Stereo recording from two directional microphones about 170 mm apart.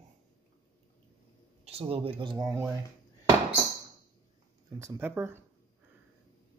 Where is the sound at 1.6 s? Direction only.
35° right (ahead or behind).